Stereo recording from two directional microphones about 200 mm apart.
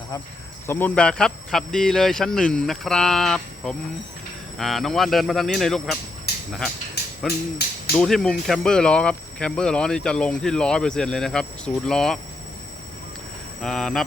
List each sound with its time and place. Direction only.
0.7 s speech: 10° left (ahead or behind)
6.3 s a sound: 55° left (ahead or behind)
7.6 s speech: 50° left (ahead or behind)
7.9 s speech: centre (ahead or behind)
13.6 s speech: 5° left (ahead or behind)